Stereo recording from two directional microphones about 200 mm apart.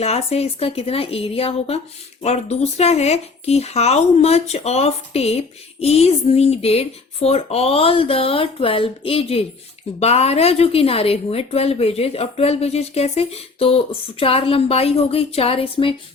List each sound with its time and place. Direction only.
0.0 s a woman's voice: 30° left (ahead or behind)